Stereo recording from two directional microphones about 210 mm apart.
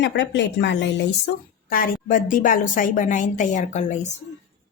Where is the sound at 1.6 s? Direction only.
45° left (ahead or behind).